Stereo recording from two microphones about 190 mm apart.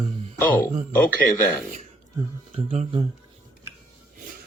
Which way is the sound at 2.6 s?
30° right (ahead or behind).